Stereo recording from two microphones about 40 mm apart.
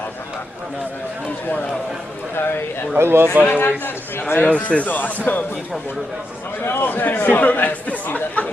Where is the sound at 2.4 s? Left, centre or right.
Left.